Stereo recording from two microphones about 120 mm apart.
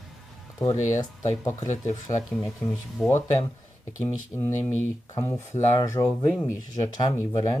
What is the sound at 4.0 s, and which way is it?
Speech, 25° left (ahead or behind).